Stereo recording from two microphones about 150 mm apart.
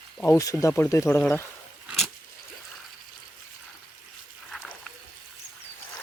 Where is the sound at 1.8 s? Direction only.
Centre (ahead or behind).